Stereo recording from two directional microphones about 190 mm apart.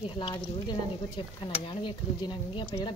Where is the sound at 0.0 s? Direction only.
25° left (ahead or behind).